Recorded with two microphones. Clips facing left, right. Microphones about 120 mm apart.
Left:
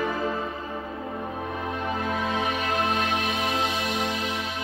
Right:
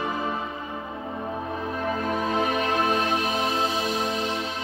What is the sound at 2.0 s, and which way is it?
Music, 40° right (ahead or behind).